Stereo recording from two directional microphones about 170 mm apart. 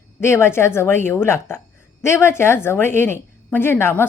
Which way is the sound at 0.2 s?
15° left (ahead or behind).